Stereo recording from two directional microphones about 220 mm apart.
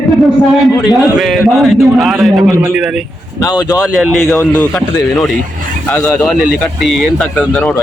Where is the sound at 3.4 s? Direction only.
15° left (ahead or behind).